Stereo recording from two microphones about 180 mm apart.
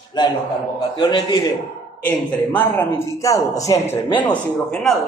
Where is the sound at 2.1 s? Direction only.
10° left (ahead or behind).